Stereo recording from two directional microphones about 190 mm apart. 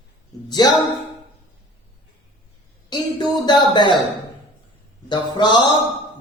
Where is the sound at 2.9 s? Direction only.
25° left (ahead or behind).